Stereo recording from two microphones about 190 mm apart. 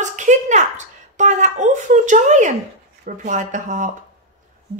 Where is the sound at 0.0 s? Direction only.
40° right (ahead or behind).